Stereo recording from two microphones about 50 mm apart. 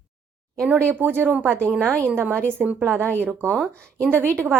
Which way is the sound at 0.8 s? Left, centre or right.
Right.